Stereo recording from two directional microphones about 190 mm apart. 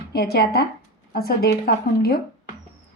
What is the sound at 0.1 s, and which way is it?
Speech, 55° left (ahead or behind).